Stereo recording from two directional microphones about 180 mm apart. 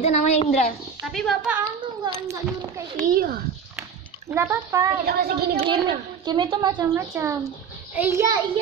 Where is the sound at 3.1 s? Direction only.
55° right (ahead or behind).